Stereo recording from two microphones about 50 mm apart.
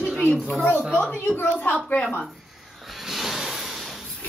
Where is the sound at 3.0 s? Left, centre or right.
Centre.